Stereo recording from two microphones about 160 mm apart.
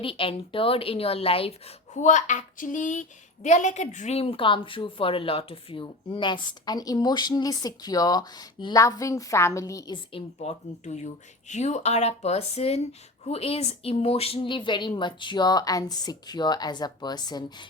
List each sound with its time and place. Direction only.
0.0 s a woman's voice: 35° left (ahead or behind)